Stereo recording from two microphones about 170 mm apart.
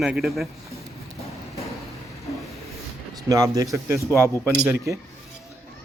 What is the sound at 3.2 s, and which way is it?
Speech, 20° right (ahead or behind).